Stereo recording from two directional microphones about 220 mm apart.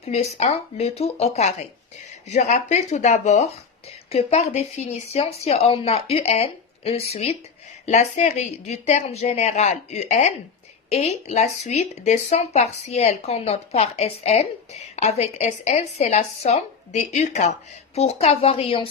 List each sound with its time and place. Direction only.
0.0 s speech: 30° left (ahead or behind)